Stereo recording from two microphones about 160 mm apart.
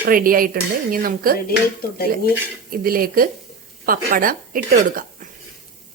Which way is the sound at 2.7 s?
65° right (ahead or behind).